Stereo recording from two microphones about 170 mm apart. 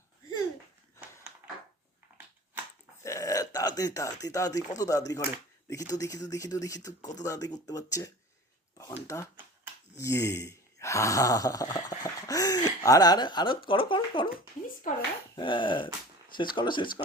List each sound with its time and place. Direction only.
3.0 s burping: 20° left (ahead or behind)
4.8 s speech: 20° left (ahead or behind)
14.8 s speech: 50° left (ahead or behind)
15.4 s speech: 30° left (ahead or behind)